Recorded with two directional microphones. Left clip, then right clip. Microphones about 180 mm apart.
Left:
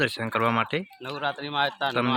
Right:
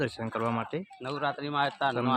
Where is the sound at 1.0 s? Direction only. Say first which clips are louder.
Left 2 dB; 65° right (ahead or behind).